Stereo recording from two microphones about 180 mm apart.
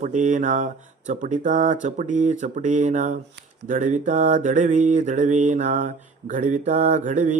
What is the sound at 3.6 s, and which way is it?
Mantra, 45° right (ahead or behind).